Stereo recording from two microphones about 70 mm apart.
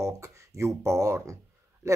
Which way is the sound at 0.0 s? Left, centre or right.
Right.